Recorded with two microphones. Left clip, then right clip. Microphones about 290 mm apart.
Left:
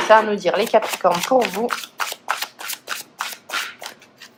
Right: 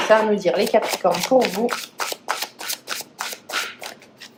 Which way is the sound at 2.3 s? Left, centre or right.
Centre.